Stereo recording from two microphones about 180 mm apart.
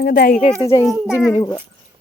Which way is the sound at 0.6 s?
20° left (ahead or behind).